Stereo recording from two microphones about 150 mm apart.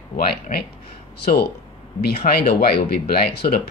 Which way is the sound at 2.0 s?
90° left.